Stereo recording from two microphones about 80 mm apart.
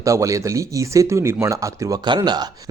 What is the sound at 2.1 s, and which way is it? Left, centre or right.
Speech, right.